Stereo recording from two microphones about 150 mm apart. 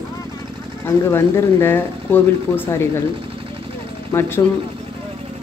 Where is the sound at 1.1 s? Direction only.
15° left (ahead or behind).